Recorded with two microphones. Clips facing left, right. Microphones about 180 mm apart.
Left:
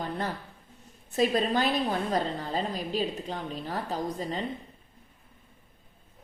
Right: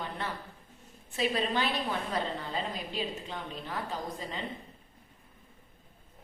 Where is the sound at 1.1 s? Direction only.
40° left (ahead or behind).